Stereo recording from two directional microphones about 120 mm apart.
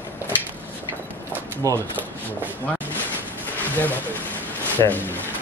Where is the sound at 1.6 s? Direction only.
30° right (ahead or behind).